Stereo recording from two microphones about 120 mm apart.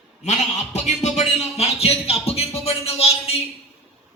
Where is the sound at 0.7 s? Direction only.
65° left (ahead or behind).